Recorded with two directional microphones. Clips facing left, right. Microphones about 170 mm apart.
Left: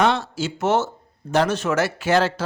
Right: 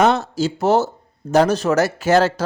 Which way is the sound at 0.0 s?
40° right (ahead or behind).